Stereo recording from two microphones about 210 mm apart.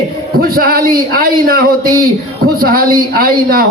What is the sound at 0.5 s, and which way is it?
A man's voice, 45° right (ahead or behind).